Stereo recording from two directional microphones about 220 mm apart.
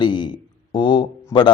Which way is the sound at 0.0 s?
20° left (ahead or behind).